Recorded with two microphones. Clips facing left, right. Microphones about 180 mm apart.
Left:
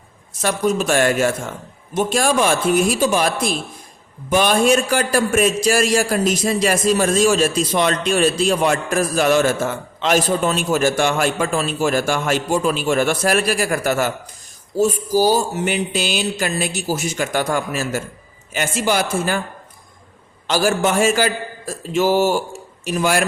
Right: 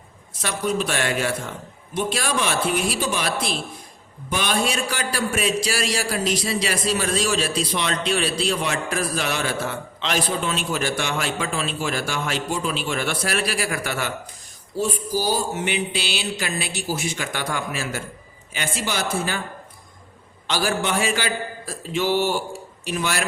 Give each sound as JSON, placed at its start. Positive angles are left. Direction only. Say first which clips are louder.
{"t": 0.4, "sound": "a man's voice", "louder": "left 6 dB", "side_deg": 45}
{"t": 20.5, "sound": "a man's voice", "louder": "left 6 dB", "side_deg": 45}